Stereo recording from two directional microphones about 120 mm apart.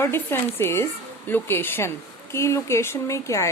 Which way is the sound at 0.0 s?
20° left (ahead or behind).